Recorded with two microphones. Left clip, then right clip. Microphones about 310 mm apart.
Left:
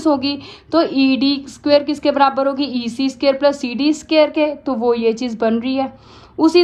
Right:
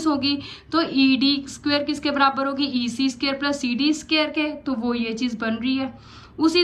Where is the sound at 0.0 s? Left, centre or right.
Centre.